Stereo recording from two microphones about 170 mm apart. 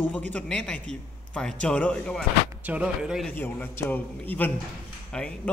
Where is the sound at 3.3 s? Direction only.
10° left (ahead or behind).